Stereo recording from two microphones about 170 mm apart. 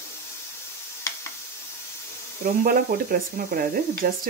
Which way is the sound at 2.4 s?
55° right (ahead or behind).